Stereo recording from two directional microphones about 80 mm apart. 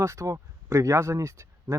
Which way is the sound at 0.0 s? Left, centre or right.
Right.